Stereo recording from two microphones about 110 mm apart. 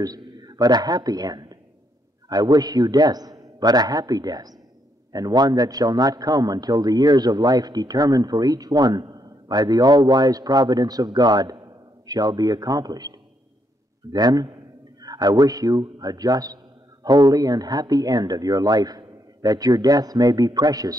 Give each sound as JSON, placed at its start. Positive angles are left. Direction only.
{"t": 0.0, "sound": "a man's voice", "side_deg": -35}